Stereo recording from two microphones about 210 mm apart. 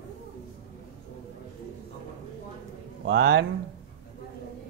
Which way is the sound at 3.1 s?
55° right (ahead or behind).